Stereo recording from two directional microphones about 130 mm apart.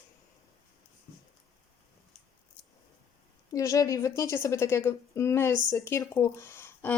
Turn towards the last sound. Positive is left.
turn(degrees=20)  # may be behind; listen again after turning